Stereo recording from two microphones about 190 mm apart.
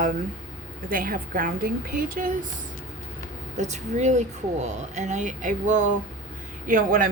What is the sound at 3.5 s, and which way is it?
Speech, 40° right (ahead or behind).